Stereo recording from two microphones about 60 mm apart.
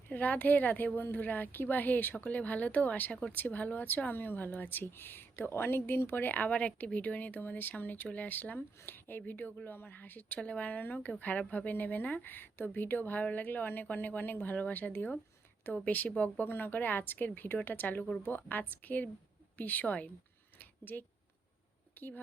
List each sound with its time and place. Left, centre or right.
0.1 s speech: left
20.6 s a sound: left
21.9 s speech: left